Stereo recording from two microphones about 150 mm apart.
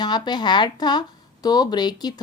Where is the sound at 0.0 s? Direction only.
30° left (ahead or behind).